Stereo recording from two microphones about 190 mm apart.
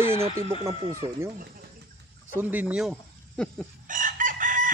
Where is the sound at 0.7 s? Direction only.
15° right (ahead or behind).